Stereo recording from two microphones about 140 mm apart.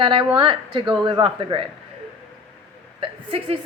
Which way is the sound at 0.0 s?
35° right (ahead or behind).